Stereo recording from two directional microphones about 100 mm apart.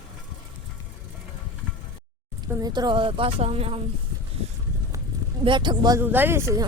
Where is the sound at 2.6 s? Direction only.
45° right (ahead or behind); by 3.8 s 90° right.